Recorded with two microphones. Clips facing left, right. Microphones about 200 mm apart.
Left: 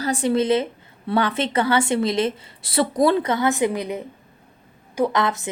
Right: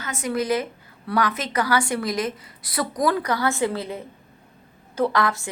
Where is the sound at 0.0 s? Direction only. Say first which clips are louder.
Left 6 dB; 30° left (ahead or behind).